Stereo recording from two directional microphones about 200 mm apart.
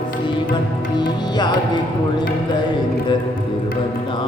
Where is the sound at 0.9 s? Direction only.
20° left (ahead or behind).